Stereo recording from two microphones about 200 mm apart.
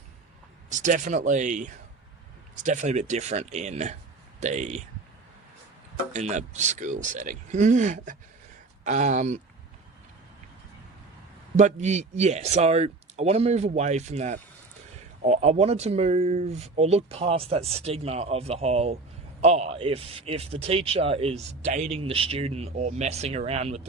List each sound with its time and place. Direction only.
0.7 s speech: 40° right (ahead or behind)
6.1 s speech: 35° right (ahead or behind)
11.5 s speech: 35° right (ahead or behind)